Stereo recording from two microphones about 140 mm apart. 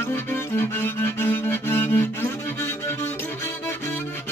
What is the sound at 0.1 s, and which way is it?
Music, 15° left (ahead or behind).